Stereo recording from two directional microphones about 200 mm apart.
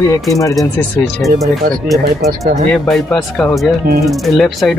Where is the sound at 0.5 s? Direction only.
Centre (ahead or behind).